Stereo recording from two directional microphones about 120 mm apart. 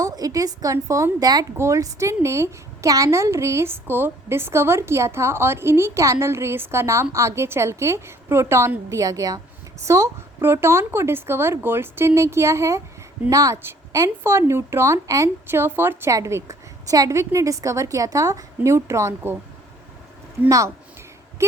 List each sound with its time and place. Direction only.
0.0 s a woman's voice: 30° right (ahead or behind)
20.5 s a woman's voice: 25° right (ahead or behind)